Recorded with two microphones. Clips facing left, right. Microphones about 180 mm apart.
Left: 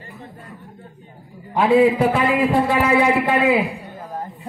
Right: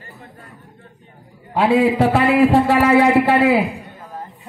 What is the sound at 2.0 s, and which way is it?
A man's voice, 85° right.